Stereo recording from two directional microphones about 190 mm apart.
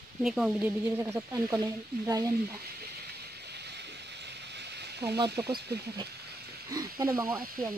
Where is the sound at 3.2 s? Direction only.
60° right (ahead or behind).